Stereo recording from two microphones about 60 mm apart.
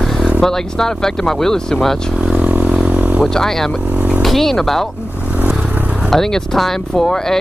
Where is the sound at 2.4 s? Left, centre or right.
Right.